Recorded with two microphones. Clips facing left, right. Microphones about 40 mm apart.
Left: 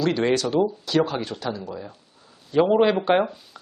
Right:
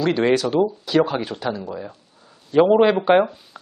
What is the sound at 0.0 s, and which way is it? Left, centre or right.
Speech, centre.